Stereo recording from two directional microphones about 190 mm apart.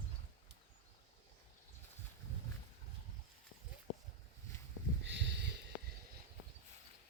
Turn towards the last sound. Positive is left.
turn(degrees=-65)  # may be behind; listen again after turning